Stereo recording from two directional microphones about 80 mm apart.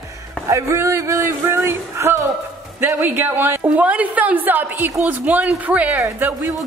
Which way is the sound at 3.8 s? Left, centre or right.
Centre.